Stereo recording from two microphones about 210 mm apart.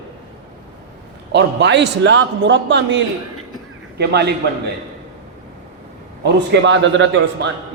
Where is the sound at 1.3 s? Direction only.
55° right (ahead or behind).